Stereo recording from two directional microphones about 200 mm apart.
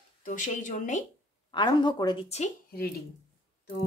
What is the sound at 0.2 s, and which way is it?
Speech, 40° left (ahead or behind).